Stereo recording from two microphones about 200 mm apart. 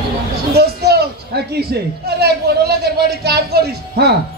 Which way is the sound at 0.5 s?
55° right (ahead or behind).